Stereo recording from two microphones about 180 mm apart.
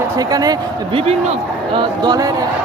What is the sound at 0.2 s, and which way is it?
Speech, 20° right (ahead or behind).